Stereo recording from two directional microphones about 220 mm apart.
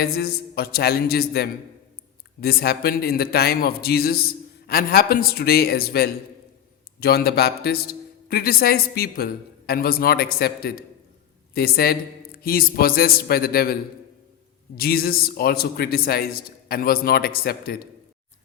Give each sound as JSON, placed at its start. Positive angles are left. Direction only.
{"t": 0.0, "sound": "a man's voice", "side_deg": 45}
{"t": 14.8, "sound": "a man's voice", "side_deg": 45}